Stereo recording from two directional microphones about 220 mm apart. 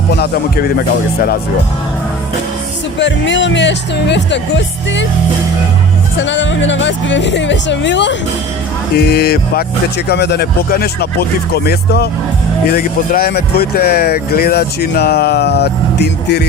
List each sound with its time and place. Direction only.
0.2 s speech: 45° left (ahead or behind)
3.0 s speech: 55° left (ahead or behind)
6.1 s speech: 55° left (ahead or behind)